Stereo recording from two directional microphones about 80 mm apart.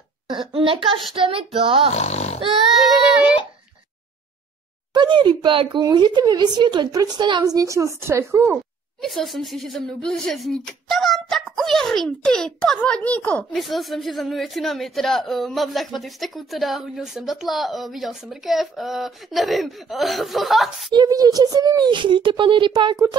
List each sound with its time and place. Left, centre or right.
0.3 s speech: right
2.7 s child singing: centre
4.9 s speech: right
6.9 s speech: right
7.4 s a woman's voice: right
9.0 s speech: centre
13.5 s speech: centre
21.1 s speech: right
21.9 s speech: right